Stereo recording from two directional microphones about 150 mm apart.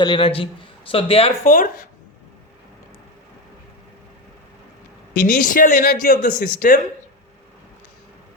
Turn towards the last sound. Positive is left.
turn(degrees=65)  # may be behind; listen again after turning